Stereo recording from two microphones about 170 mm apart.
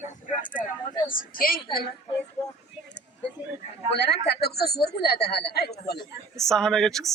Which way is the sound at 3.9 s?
80° left.